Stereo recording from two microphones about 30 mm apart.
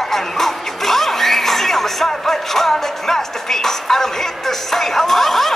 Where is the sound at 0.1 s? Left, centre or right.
Centre.